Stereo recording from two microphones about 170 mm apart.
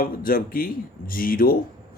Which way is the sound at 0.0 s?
55° left (ahead or behind).